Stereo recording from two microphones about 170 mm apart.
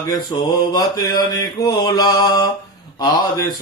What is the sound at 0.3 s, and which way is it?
Mantra, 25° left (ahead or behind).